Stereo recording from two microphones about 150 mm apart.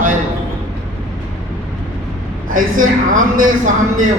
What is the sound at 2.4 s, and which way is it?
A man's voice, 65° right (ahead or behind).